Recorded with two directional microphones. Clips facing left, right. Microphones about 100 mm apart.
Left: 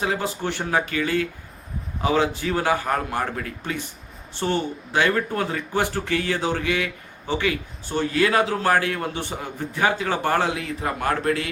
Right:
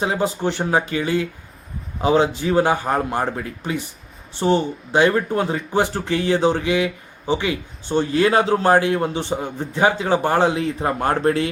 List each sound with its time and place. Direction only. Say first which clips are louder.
0.0 s speech: right 4 dB; 20° right (ahead or behind)